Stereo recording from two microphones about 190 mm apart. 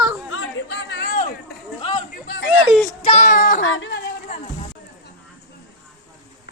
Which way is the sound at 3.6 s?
80° left.